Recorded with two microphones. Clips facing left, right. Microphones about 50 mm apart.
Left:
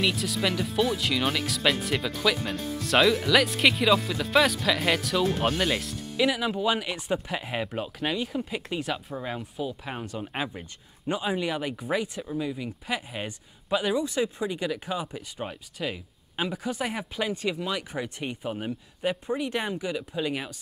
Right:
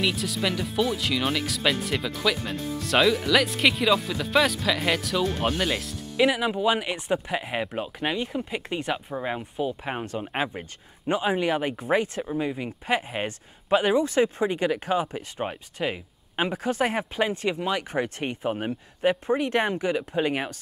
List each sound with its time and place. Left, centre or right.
0.0 s speech: centre
6.1 s speech: centre
14.0 s speech: right